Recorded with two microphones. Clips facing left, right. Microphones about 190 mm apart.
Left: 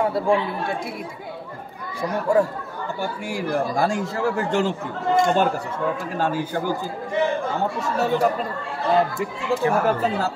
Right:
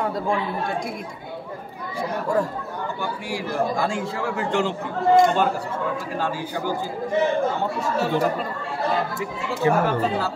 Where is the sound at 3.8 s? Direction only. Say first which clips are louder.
Left 3 dB; 45° left (ahead or behind).